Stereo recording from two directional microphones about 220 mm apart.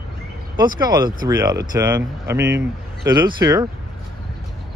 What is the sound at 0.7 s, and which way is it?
Speech, 20° right (ahead or behind).